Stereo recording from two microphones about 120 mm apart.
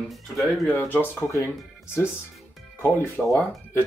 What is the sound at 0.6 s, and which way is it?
Speech, 15° left (ahead or behind).